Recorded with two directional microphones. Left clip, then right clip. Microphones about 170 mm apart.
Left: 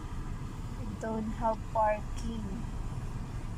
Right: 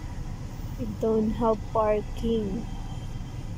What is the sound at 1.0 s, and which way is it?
Speech, 15° right (ahead or behind).